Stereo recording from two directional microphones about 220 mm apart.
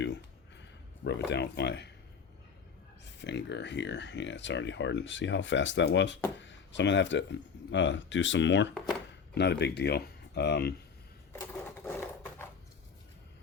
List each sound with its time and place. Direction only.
0.0 s a sound: 55° left (ahead or behind)
1.0 s speech: 50° left (ahead or behind)
3.0 s speech: 50° left (ahead or behind)